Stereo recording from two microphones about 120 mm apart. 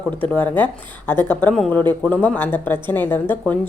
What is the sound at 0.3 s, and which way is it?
Speech, 15° left (ahead or behind).